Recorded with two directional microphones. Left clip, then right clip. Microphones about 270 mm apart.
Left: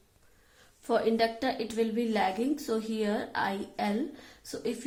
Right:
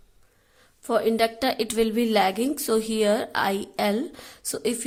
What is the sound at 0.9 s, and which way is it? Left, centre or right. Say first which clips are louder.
A woman's voice: right 5 dB; right.